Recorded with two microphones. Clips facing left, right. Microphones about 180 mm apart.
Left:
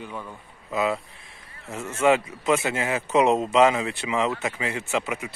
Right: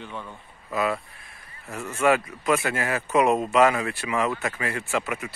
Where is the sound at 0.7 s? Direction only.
20° left (ahead or behind).